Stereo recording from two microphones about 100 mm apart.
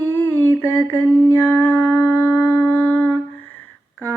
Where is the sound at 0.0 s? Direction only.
20° left (ahead or behind).